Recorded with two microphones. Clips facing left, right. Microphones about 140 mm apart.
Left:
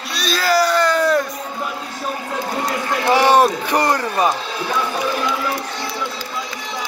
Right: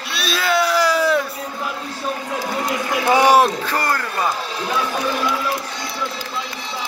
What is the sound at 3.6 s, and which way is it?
Speech, 20° left (ahead or behind).